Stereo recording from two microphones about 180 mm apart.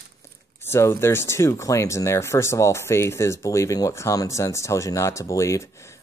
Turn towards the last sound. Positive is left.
turn(degrees=15)  # may be behind; listen again after turning